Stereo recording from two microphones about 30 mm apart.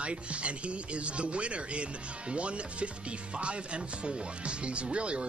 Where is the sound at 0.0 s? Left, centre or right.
Right.